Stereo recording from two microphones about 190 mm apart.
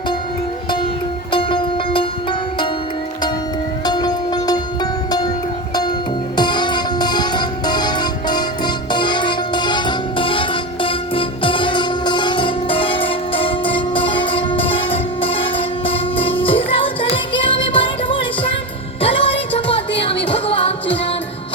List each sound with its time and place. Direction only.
1.3 s music: 25° left (ahead or behind)
3.8 s music: 20° left (ahead or behind)
6.3 s music: 25° left (ahead or behind)